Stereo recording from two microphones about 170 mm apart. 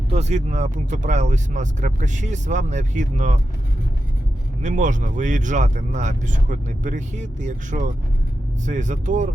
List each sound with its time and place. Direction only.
0.1 s speech: 40° right (ahead or behind)
4.6 s speech: 50° right (ahead or behind)